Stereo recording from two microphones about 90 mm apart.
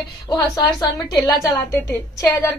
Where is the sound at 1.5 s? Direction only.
25° left (ahead or behind).